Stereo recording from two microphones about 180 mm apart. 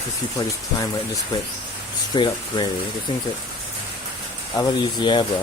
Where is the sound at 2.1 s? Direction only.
25° left (ahead or behind).